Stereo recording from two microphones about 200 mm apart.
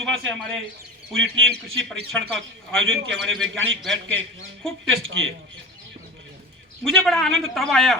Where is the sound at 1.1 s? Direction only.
70° right (ahead or behind).